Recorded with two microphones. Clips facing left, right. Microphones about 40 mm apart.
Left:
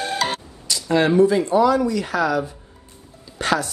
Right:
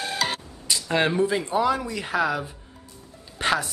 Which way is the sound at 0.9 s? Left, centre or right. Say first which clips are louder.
Left 7 dB; right.